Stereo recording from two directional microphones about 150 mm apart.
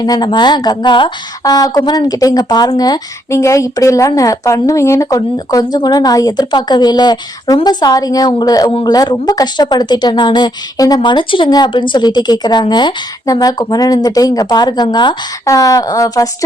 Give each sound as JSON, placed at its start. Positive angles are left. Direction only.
{"t": 0.0, "sound": "speech", "side_deg": 30}